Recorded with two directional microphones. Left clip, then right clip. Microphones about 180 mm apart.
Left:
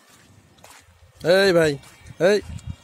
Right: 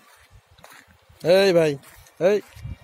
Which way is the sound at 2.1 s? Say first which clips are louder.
Left 2 dB; 35° left (ahead or behind).